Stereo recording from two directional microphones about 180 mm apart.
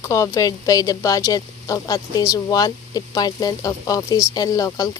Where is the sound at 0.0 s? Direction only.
15° left (ahead or behind).